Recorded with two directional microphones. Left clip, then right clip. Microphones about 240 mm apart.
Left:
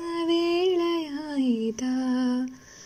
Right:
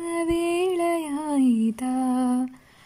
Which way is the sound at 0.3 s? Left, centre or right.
Right.